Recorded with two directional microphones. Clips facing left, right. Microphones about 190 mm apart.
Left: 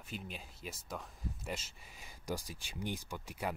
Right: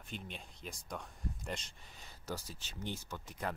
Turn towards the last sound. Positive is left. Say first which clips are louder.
# left 1 dB
turn(degrees=10)  # may be behind; listen again after turning